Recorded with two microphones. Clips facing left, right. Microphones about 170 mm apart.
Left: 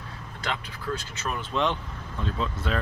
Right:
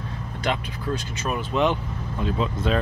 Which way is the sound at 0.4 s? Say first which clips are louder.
Right 6 dB; 20° right (ahead or behind).